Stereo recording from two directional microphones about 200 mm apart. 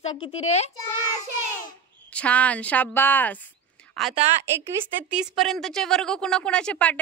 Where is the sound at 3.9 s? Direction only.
Centre (ahead or behind).